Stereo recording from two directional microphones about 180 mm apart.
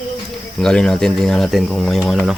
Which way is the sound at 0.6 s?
5° left (ahead or behind).